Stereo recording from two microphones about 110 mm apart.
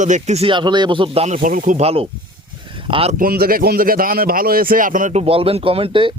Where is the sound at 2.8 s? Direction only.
55° right (ahead or behind).